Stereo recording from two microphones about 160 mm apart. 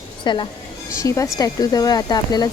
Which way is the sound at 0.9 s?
20° left (ahead or behind).